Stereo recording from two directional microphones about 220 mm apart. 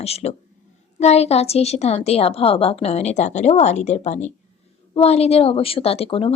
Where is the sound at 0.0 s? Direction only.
30° left (ahead or behind).